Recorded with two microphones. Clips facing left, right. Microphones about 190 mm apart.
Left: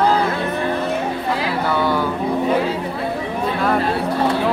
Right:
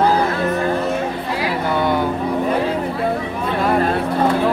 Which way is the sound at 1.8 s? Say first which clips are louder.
Right 2 dB; 20° right (ahead or behind).